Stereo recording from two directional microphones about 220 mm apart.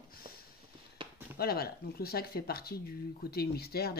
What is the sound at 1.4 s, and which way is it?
Speech, 45° left (ahead or behind).